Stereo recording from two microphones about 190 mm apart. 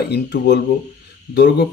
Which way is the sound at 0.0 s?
60° left (ahead or behind).